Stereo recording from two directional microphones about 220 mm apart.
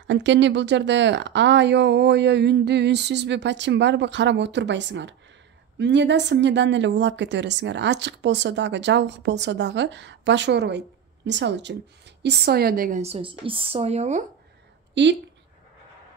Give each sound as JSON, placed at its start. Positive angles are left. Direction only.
{"t": 0.0, "sound": "speech", "side_deg": -55}
{"t": 13.0, "sound": "speech", "side_deg": -25}
{"t": 15.0, "sound": "a woman's voice", "side_deg": -55}